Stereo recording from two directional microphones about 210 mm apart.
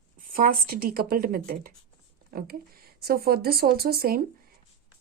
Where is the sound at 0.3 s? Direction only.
45° right (ahead or behind).